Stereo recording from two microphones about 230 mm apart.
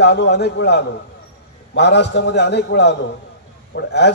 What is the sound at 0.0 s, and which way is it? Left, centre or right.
A man's voice, left.